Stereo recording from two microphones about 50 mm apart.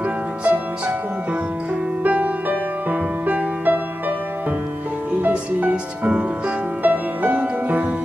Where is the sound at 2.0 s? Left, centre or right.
Right.